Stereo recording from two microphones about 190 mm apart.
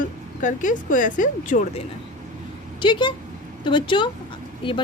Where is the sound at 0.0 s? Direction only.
45° left (ahead or behind).